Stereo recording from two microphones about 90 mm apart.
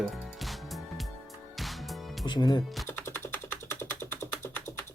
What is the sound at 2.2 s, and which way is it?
Speech, 55° left (ahead or behind).